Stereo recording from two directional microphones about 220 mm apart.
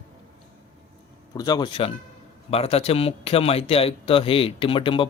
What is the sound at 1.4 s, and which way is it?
A man's voice, 15° left (ahead or behind).